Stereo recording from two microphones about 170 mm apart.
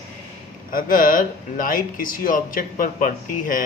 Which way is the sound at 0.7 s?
55° left (ahead or behind).